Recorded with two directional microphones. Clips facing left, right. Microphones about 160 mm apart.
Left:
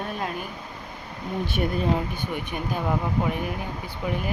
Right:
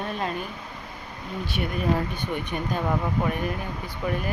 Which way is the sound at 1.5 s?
40° left (ahead or behind).